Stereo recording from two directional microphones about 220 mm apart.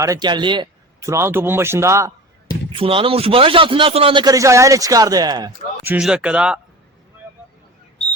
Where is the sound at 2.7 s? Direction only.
25° right (ahead or behind).